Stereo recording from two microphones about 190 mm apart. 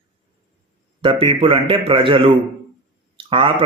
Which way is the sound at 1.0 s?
30° right (ahead or behind).